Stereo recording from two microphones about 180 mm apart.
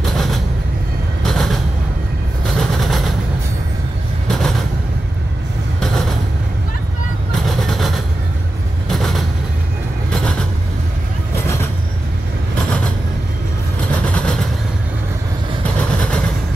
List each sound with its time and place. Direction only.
0.0 s vehicle: centre (ahead or behind)
1.2 s a sound: centre (ahead or behind)
2.5 s train: centre (ahead or behind)
4.3 s vehicle: centre (ahead or behind)
5.8 s train: centre (ahead or behind)
7.4 s vehicle: centre (ahead or behind)
14.0 s vehicle: 5° left (ahead or behind)
15.6 s vehicle: 5° left (ahead or behind)